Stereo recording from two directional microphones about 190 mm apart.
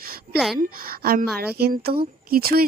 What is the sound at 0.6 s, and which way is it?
A woman's voice, 50° right (ahead or behind).